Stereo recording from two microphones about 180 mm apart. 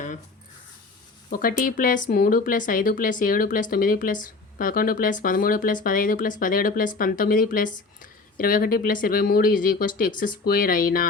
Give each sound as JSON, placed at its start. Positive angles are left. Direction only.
{"t": 1.3, "sound": "speech", "side_deg": 50}